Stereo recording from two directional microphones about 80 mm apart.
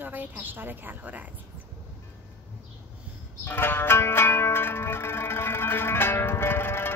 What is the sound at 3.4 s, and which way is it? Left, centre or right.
Music, left.